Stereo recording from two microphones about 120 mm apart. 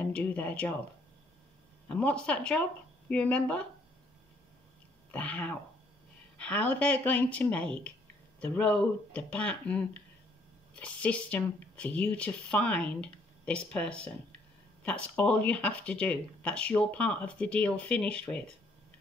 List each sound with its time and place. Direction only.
0.0 s speech: 10° left (ahead or behind)
1.9 s speech: 10° left (ahead or behind)
5.1 s speech: 10° left (ahead or behind)